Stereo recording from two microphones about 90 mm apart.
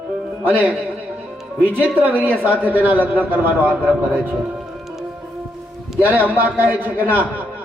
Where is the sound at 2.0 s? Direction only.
20° right (ahead or behind).